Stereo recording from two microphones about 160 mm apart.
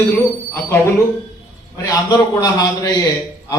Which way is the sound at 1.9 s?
25° left (ahead or behind).